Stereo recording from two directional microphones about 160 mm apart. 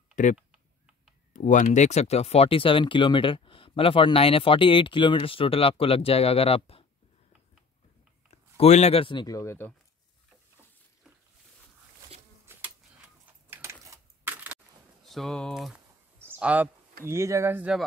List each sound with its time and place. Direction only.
0.1 s typing: 50° left (ahead or behind)
1.3 s speech: 55° left (ahead or behind); by 6.9 s 35° left (ahead or behind)
8.3 s speech: 45° left (ahead or behind); by 9.7 s 15° left (ahead or behind)
12.5 s insect: 15° right (ahead or behind)
13.5 s a sound: 15° right (ahead or behind)
15.0 s speech: centre (ahead or behind)
16.2 s a sound: 10° right (ahead or behind)
17.0 s speech: 15° right (ahead or behind)